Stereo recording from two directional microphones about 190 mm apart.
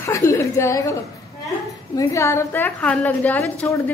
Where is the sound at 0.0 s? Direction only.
15° left (ahead or behind).